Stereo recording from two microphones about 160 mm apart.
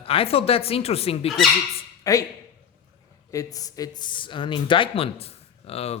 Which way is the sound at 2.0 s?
20° left (ahead or behind).